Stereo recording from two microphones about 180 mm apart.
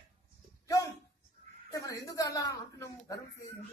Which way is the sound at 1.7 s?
20° left (ahead or behind).